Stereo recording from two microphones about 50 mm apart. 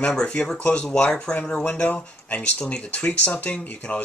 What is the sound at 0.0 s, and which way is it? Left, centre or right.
Speech, centre.